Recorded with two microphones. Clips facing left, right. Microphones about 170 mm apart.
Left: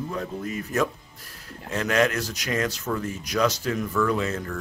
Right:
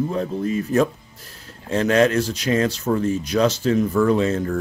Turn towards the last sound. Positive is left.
turn(degrees=-30)  # may be behind; listen again after turning